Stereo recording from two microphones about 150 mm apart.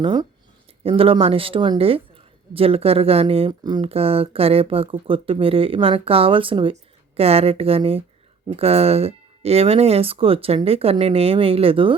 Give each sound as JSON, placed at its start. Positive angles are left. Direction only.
{"t": 0.0, "sound": "speech", "side_deg": -30}